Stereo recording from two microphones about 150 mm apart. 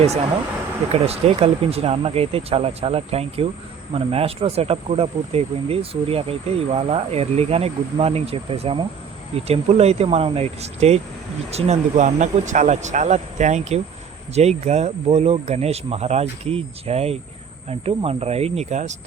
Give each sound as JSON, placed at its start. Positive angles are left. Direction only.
{"t": 1.0, "sound": "speech", "side_deg": -45}